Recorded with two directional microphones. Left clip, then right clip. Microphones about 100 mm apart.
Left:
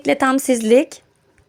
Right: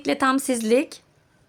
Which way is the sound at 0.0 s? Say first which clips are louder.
Left 5 dB; 40° left (ahead or behind).